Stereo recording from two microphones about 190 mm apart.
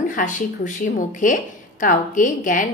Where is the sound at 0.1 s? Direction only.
45° left (ahead or behind).